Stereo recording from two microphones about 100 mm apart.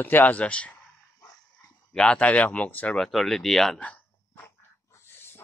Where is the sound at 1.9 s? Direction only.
10° left (ahead or behind).